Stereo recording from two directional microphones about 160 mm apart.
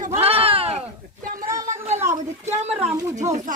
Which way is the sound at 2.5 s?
45° right (ahead or behind).